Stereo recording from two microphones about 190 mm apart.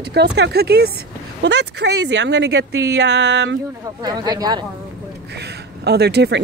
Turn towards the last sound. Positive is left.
turn(degrees=-60)  # may be behind; listen again after turning